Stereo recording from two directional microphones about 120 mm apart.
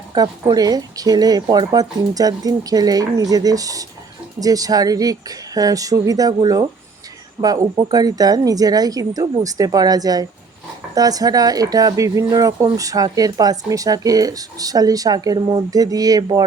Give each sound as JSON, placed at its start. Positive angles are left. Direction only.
{"t": 0.1, "sound": "speech", "side_deg": -35}